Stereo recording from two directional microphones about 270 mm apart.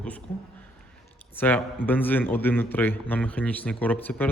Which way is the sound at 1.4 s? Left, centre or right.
Centre.